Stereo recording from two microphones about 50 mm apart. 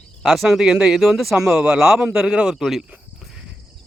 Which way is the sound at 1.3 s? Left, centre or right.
Centre.